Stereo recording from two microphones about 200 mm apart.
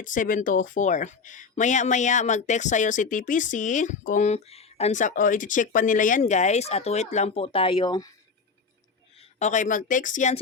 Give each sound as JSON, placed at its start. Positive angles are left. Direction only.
{"t": 0.0, "sound": "speech", "side_deg": 40}
{"t": 9.1, "sound": "speech", "side_deg": 35}